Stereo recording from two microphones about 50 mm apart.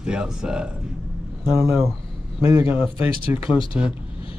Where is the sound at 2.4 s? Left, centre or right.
Right.